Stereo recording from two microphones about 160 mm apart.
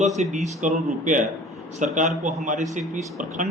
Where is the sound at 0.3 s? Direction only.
45° right (ahead or behind).